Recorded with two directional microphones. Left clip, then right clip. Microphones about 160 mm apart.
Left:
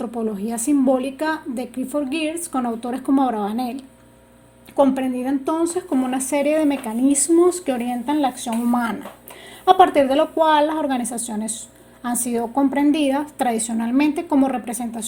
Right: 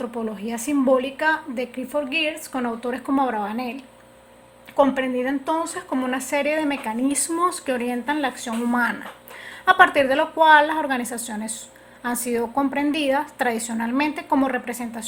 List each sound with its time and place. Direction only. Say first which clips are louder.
0.0 s a woman's voice: left 3 dB; 25° left (ahead or behind)
9.7 s a woman's voice: left 1 dB; 20° left (ahead or behind)